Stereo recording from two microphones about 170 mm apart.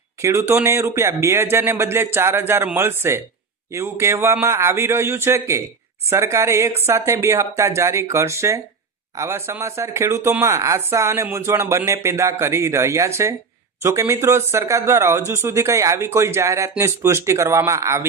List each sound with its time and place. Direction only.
0.2 s speech: 15° right (ahead or behind)